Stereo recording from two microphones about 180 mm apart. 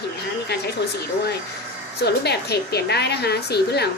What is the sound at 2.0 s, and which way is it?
Speech, 65° left (ahead or behind).